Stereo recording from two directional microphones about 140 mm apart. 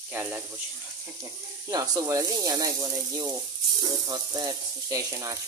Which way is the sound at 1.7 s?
25° right (ahead or behind).